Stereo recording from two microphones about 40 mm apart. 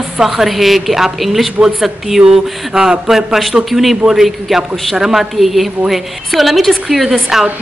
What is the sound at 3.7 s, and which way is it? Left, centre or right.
A woman's voice, centre.